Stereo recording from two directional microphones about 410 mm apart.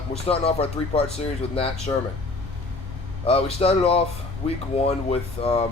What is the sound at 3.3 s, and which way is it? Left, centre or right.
Speech, centre.